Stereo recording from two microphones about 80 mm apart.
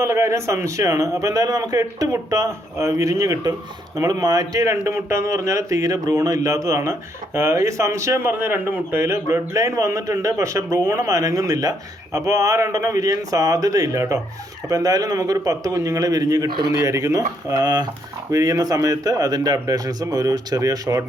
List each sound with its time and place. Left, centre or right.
0.0 s speech: right
14.7 s speech: right